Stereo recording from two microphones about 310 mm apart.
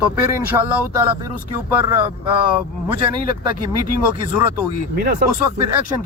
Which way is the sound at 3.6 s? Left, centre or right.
Right.